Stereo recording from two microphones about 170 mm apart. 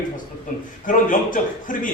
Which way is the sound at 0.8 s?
50° left (ahead or behind).